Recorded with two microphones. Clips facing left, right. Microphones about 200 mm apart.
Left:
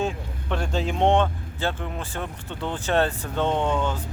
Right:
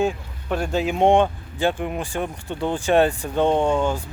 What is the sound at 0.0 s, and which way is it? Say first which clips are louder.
Speech: right 4 dB; 10° right (ahead or behind).